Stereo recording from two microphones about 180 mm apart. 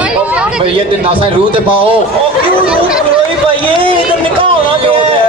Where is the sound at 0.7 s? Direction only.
30° right (ahead or behind).